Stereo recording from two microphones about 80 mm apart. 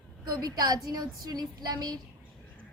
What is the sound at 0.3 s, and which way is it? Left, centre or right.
A woman's voice, right.